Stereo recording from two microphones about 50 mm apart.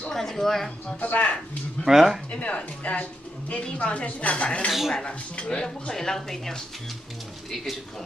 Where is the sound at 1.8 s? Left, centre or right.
Centre.